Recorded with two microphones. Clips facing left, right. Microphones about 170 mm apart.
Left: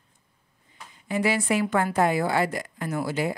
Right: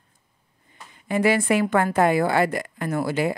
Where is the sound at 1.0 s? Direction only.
55° right (ahead or behind).